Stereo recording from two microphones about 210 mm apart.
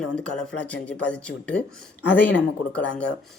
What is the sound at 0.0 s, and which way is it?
Speech, 5° left (ahead or behind).